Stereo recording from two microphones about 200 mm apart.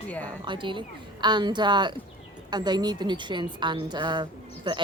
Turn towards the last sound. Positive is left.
turn(degrees=-25)  # may be behind; listen again after turning